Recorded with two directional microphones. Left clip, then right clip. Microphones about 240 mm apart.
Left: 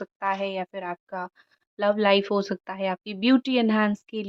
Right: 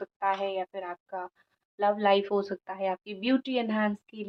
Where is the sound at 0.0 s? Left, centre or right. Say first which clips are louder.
Left 2 dB; left.